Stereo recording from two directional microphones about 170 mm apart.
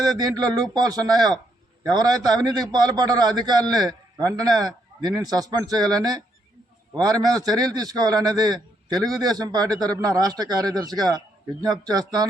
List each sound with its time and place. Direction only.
0.0 s a man's voice: 20° right (ahead or behind)
2.3 s a man's voice: 20° right (ahead or behind)